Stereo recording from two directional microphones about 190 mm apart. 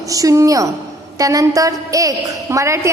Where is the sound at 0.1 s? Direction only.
15° right (ahead or behind).